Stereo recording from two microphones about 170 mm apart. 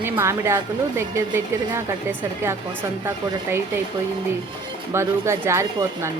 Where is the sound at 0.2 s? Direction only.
15° right (ahead or behind).